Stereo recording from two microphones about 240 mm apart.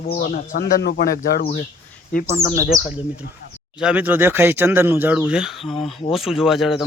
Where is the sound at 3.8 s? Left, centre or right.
Centre.